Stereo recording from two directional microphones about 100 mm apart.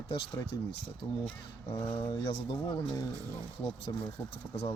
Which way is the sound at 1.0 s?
60° left (ahead or behind).